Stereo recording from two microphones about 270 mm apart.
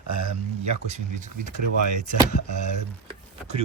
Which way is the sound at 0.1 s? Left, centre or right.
Right.